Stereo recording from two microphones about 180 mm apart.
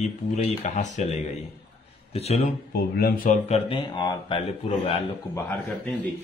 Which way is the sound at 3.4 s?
30° left (ahead or behind).